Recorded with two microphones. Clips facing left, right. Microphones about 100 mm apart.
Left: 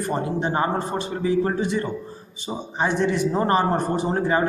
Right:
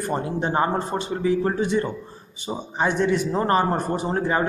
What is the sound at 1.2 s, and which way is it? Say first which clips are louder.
Speech: even; 10° left (ahead or behind).